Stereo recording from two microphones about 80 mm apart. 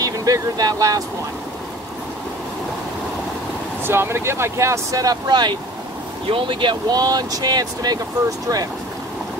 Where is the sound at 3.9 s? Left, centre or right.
Right.